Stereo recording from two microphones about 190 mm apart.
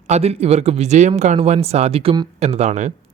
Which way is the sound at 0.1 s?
35° right (ahead or behind).